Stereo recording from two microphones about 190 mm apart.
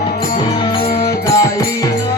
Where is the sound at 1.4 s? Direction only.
20° left (ahead or behind).